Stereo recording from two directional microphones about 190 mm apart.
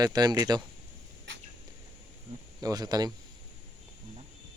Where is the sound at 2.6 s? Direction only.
20° right (ahead or behind).